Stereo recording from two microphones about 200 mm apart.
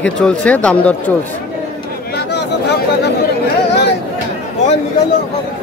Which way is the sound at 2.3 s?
55° left (ahead or behind).